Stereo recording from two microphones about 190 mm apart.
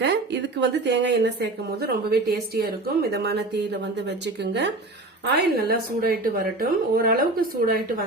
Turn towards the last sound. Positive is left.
turn(degrees=-50)  # may be behind; listen again after turning